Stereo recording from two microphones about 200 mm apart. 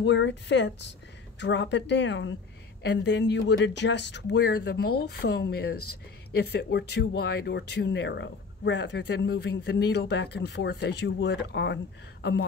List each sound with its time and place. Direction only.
0.0 s speech: 60° left (ahead or behind)